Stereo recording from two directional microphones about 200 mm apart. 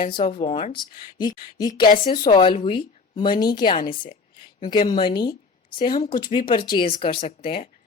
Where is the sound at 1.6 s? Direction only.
20° left (ahead or behind).